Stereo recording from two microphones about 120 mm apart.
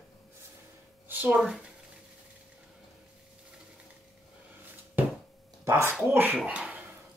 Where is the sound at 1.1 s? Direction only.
15° right (ahead or behind).